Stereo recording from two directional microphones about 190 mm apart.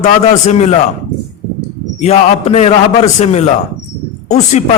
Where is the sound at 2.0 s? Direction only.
35° left (ahead or behind).